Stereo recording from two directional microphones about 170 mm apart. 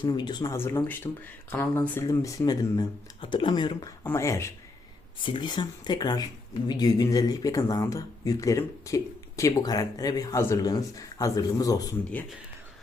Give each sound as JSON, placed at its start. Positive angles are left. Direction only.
{"t": 0.0, "sound": "speech", "side_deg": 25}
{"t": 0.5, "sound": "speech", "side_deg": 15}
{"t": 4.0, "sound": "speech", "side_deg": 15}
{"t": 5.2, "sound": "speech", "side_deg": 30}